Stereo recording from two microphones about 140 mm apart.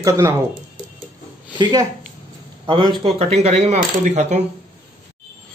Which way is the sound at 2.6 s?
35° right (ahead or behind).